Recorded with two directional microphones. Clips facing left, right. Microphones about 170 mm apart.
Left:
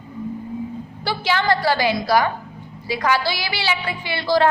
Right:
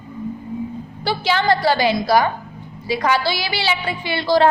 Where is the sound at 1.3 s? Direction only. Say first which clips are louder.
Right 2 dB; 25° right (ahead or behind).